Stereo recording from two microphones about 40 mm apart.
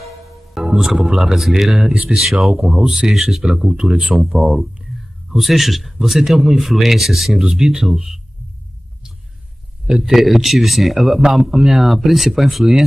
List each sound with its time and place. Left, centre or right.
0.6 s a man's voice: centre
2.5 s speech: centre
3.1 s a man's voice: centre
4.0 s speech: right
4.9 s a man's voice: centre
9.8 s a man's voice: centre